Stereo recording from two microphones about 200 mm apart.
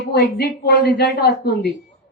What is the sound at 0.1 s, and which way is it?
A woman's voice, 55° left (ahead or behind).